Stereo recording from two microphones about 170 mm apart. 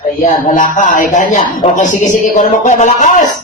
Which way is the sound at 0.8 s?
55° left (ahead or behind).